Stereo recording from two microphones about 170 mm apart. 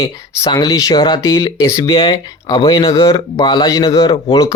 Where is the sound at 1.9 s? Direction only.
30° left (ahead or behind).